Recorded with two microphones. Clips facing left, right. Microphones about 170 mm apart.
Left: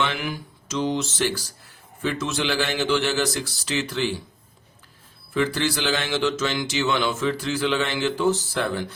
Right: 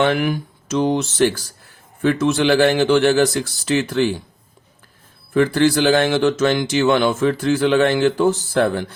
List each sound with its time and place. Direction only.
0.0 s speech: 50° right (ahead or behind)
5.3 s speech: 50° right (ahead or behind)